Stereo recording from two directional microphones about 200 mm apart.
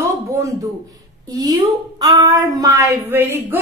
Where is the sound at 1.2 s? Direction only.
20° right (ahead or behind).